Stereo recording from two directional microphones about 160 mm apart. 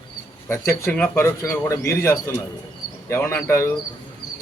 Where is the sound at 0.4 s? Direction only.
15° left (ahead or behind).